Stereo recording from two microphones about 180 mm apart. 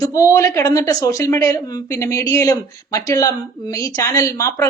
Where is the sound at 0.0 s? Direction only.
15° left (ahead or behind).